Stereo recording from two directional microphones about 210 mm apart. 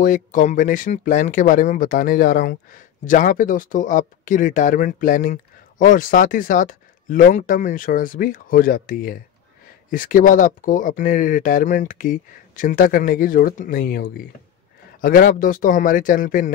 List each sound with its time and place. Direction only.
0.0 s speech: 40° left (ahead or behind)